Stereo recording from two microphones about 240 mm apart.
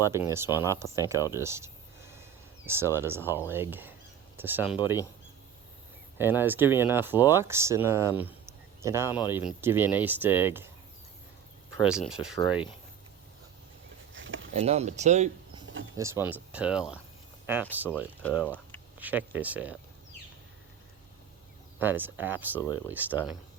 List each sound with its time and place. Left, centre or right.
0.0 s speech: centre
6.1 s speech: centre
11.8 s speech: centre
14.1 s a sound: right
14.6 s speech: right
16.0 s speech: centre
18.4 s speech: centre
18.9 s speech: centre
21.8 s speech: centre